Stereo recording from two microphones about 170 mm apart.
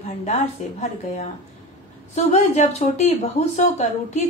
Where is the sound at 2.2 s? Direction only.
40° left (ahead or behind).